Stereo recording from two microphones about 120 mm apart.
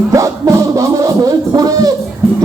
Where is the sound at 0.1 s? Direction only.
25° right (ahead or behind).